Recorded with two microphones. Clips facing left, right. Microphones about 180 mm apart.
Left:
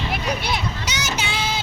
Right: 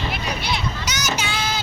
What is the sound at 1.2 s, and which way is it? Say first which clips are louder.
Child singing: even; 25° left (ahead or behind).